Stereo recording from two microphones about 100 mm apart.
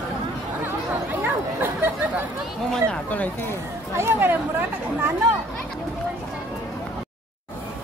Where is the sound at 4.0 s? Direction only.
20° right (ahead or behind).